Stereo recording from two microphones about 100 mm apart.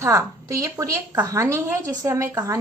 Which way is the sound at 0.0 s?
30° right (ahead or behind).